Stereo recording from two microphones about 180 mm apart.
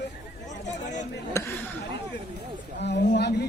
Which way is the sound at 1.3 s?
15° left (ahead or behind).